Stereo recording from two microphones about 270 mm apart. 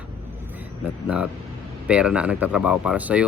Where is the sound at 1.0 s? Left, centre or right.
Centre.